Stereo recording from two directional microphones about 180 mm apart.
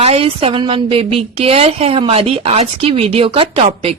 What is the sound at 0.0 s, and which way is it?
A woman's voice, 35° right (ahead or behind).